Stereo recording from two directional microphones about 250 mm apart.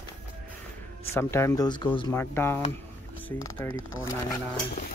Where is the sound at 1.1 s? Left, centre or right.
Centre.